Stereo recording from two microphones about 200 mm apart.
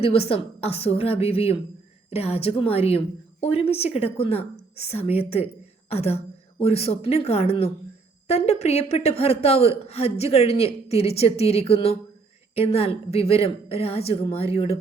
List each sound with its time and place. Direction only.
0.0 s a woman's voice: 30° left (ahead or behind)